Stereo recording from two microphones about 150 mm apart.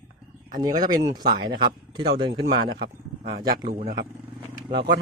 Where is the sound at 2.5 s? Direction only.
90° right.